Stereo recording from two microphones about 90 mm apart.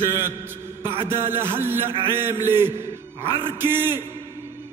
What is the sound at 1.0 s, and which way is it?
A man's voice, 25° right (ahead or behind).